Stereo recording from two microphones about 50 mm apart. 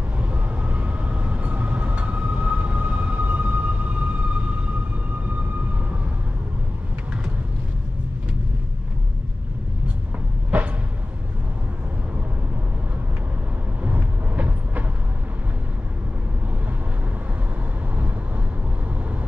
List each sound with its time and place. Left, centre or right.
0.2 s train: right
13.8 s vehicle: right